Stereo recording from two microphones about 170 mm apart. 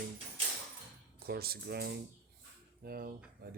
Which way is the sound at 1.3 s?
65° right (ahead or behind).